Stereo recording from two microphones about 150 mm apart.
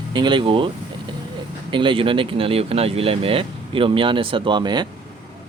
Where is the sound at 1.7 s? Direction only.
35° right (ahead or behind).